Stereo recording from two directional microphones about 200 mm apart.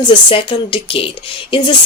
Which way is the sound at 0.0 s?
25° left (ahead or behind).